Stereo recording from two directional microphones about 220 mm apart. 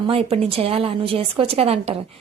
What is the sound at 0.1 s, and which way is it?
A woman's voice, 25° right (ahead or behind).